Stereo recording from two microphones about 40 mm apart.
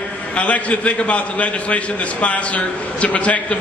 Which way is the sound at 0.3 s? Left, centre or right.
Left.